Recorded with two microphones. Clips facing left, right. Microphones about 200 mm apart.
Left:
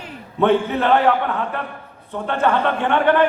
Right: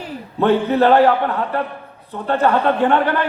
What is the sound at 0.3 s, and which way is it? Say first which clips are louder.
A man's voice: right 2 dB; 35° right (ahead or behind).